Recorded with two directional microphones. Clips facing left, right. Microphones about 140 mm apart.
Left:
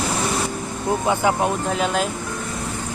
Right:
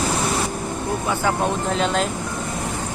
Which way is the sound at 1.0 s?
15° left (ahead or behind).